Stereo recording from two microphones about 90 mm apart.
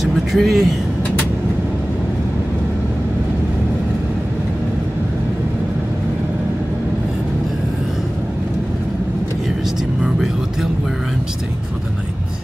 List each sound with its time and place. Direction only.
0.0 s vehicle: centre (ahead or behind)
10.0 s vehicle: 5° right (ahead or behind)